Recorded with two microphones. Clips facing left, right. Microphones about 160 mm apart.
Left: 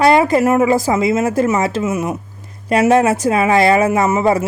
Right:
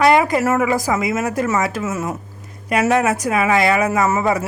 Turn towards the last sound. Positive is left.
turn(degrees=25)  # may be behind; listen again after turning